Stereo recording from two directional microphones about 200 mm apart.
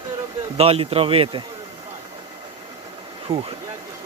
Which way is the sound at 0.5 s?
30° right (ahead or behind).